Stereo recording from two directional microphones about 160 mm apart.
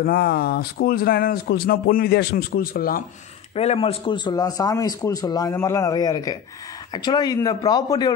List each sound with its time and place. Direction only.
0.0 s speech: 70° left (ahead or behind)
3.5 s a man's voice: 40° left (ahead or behind)